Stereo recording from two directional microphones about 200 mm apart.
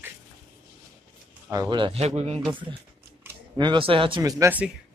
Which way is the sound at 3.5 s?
25° right (ahead or behind).